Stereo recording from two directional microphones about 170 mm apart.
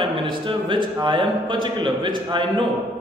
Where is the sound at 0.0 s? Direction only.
30° right (ahead or behind).